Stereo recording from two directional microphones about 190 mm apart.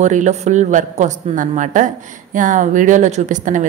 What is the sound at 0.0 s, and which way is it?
A woman's voice, 40° right (ahead or behind).